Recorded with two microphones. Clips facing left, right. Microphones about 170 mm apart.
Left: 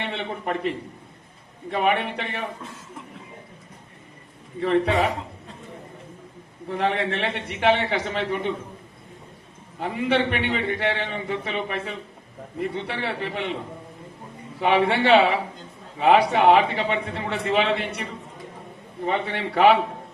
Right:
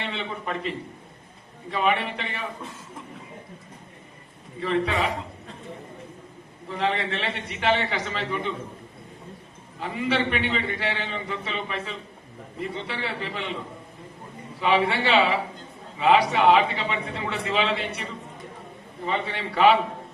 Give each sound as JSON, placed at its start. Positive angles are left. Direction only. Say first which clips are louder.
{"t": 0.0, "sound": "a sound", "louder": "left 3 dB", "side_deg": 55}
{"t": 1.7, "sound": "a man's voice", "louder": "left 2 dB", "side_deg": 55}
{"t": 6.7, "sound": "a man's voice", "louder": "left 2 dB", "side_deg": 55}
{"t": 9.8, "sound": "a man's voice", "louder": "left 3 dB", "side_deg": 60}
{"t": 14.6, "sound": "a man's voice", "louder": "left 3 dB", "side_deg": 60}
{"t": 19.0, "sound": "a man's voice", "louder": "left 3 dB", "side_deg": 55}